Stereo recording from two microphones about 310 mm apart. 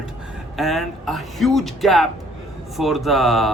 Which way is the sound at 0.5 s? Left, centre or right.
Centre.